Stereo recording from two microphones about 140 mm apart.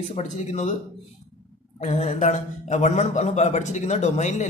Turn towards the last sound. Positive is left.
turn(degrees=55)  # may be behind; listen again after turning